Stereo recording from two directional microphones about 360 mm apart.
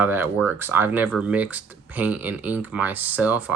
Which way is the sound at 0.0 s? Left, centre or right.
Centre.